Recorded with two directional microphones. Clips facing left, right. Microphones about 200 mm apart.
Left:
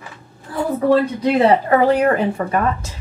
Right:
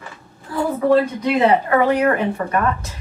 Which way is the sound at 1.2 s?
35° left (ahead or behind).